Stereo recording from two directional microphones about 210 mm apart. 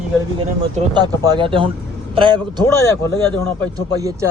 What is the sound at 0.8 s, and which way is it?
Speech, 20° right (ahead or behind).